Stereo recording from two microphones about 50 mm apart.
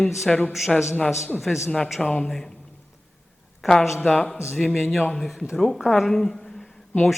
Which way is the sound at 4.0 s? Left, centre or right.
Left.